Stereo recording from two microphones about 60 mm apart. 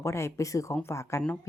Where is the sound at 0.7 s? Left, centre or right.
Left.